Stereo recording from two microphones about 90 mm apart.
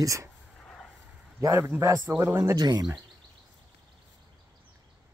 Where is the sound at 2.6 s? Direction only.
50° right (ahead or behind).